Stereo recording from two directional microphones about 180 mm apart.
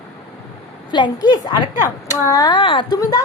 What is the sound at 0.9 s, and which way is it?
A woman's voice, 25° left (ahead or behind).